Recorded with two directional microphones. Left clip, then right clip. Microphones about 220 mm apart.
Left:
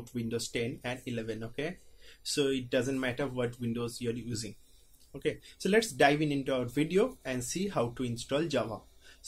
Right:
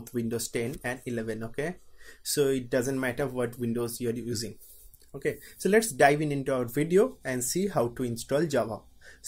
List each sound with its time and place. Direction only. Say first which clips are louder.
0.0 s speech: right 4 dB; 35° right (ahead or behind)
5.2 s speech: right 3 dB; 35° right (ahead or behind)